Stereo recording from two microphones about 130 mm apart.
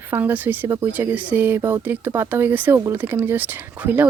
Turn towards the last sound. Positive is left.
turn(degrees=-15)  # may be behind; listen again after turning